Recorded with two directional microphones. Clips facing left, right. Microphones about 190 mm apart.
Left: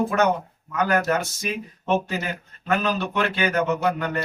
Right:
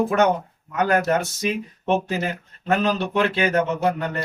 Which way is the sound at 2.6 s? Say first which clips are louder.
Right 2 dB; 30° right (ahead or behind).